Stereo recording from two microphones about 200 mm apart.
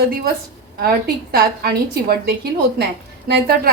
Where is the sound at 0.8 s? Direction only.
50° right (ahead or behind).